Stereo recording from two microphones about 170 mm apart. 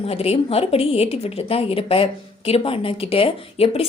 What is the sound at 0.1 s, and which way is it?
Speech, 35° left (ahead or behind).